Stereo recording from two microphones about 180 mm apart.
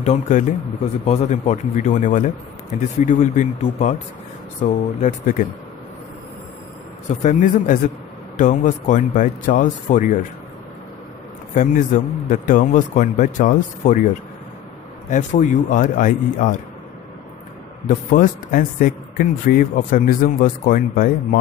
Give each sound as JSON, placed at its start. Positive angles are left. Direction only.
{"t": 0.0, "sound": "speech", "side_deg": 45}
{"t": 7.1, "sound": "speech", "side_deg": 45}
{"t": 11.5, "sound": "a man's voice", "side_deg": 45}
{"t": 15.0, "sound": "speech", "side_deg": 45}
{"t": 17.8, "sound": "speech", "side_deg": 50}